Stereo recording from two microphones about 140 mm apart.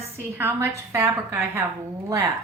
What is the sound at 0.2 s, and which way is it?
A woman's voice, 15° right (ahead or behind).